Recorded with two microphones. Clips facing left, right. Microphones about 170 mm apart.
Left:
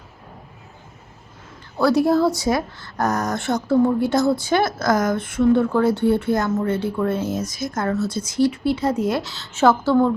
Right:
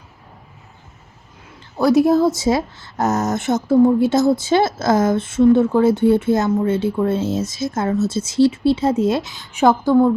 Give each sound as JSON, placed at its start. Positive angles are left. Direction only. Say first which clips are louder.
{"t": 1.8, "sound": "speech", "louder": "right 3 dB", "side_deg": -20}